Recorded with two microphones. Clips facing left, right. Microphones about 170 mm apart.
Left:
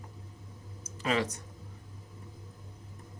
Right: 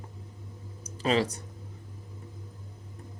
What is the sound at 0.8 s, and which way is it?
Speech, 30° right (ahead or behind).